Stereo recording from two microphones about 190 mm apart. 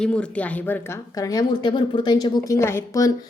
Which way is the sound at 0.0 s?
5° left (ahead or behind).